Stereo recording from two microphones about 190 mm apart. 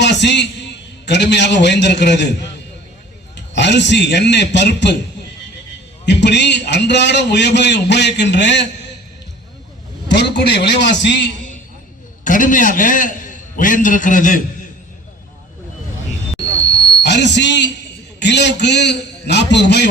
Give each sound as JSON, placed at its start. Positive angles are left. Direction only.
{"t": 0.0, "sound": "a man's voice", "side_deg": 65}
{"t": 3.3, "sound": "a man's voice", "side_deg": 65}
{"t": 6.1, "sound": "a man's voice", "side_deg": 65}
{"t": 10.1, "sound": "a man's voice", "side_deg": 65}
{"t": 12.2, "sound": "a man's voice", "side_deg": 45}
{"t": 17.0, "sound": "a man's voice", "side_deg": 65}